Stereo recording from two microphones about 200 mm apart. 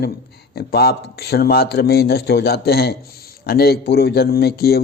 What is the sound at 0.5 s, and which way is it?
A man's voice, 50° left (ahead or behind).